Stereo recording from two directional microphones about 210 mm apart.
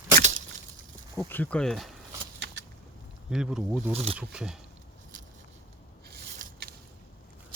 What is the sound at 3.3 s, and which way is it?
Speech, 5° right (ahead or behind).